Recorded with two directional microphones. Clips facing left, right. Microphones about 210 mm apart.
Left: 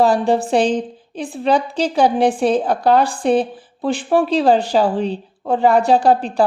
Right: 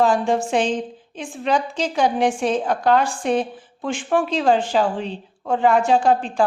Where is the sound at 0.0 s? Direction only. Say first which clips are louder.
Left 3 dB; 35° left (ahead or behind).